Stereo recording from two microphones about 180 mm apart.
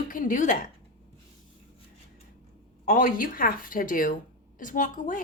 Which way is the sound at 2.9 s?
50° left (ahead or behind).